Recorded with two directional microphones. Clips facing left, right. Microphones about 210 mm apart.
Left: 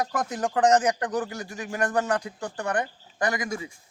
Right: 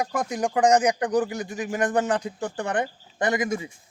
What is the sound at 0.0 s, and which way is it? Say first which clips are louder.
A man's voice: right 2 dB; 10° right (ahead or behind).